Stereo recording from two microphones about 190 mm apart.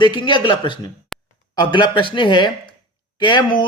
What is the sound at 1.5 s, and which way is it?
Speech, 25° left (ahead or behind).